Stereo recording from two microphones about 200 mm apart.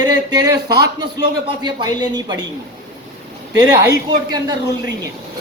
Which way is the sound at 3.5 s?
20° right (ahead or behind).